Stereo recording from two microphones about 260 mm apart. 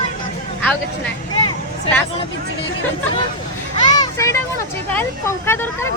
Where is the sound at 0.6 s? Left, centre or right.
Centre.